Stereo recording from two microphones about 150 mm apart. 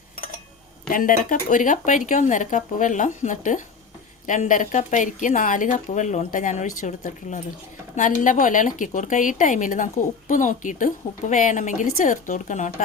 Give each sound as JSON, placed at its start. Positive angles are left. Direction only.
{"t": 0.9, "sound": "speech", "side_deg": 65}